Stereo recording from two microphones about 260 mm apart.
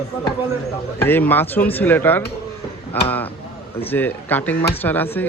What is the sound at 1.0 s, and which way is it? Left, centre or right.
Speech, centre.